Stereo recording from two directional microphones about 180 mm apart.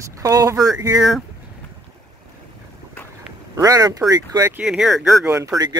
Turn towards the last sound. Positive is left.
turn(degrees=-20)  # may be behind; listen again after turning